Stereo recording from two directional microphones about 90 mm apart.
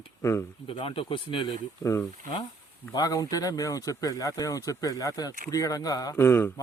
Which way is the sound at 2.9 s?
40° left (ahead or behind).